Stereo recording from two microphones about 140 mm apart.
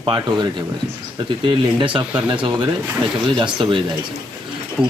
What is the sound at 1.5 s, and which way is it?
Speech, 35° right (ahead or behind).